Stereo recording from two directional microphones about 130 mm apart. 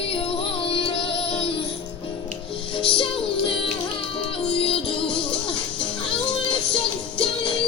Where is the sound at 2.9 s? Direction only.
40° left (ahead or behind).